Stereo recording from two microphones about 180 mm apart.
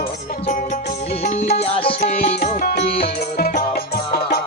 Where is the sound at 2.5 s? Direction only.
50° left (ahead or behind).